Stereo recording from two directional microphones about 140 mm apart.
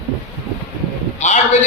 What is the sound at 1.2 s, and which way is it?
Speech, 55° left (ahead or behind).